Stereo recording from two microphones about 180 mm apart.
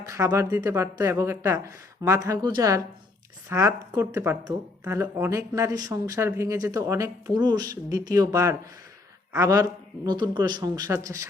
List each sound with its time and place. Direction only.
0.0 s speech: 15° right (ahead or behind)